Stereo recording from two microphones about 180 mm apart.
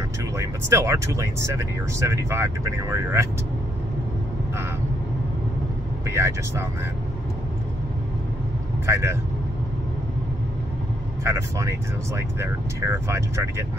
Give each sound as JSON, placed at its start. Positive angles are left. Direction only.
{"t": 0.4, "sound": "speech", "side_deg": -15}
{"t": 6.0, "sound": "speech", "side_deg": -15}
{"t": 8.8, "sound": "speech", "side_deg": -15}
{"t": 11.2, "sound": "speech", "side_deg": -15}